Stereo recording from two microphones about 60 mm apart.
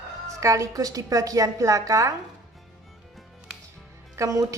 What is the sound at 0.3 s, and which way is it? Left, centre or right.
A woman's voice, right.